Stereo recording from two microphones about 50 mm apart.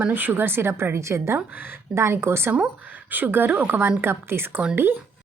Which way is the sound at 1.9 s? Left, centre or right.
Right.